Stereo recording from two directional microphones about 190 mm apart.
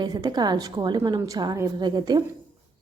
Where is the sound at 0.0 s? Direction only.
20° right (ahead or behind).